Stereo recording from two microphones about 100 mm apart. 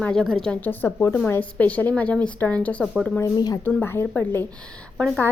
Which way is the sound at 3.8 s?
25° left (ahead or behind).